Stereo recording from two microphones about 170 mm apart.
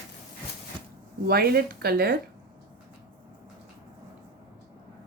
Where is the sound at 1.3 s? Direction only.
65° right (ahead or behind).